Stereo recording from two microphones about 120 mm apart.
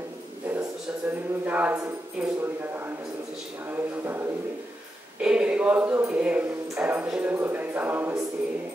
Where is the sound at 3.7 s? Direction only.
20° right (ahead or behind).